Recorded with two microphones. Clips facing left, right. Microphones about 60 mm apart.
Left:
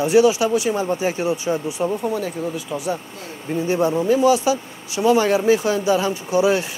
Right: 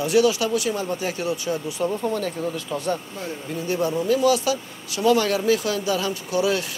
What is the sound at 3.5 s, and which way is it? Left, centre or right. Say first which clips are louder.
Speech: left 6 dB; left.